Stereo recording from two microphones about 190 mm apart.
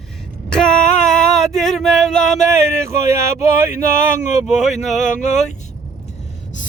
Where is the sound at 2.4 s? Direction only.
15° right (ahead or behind).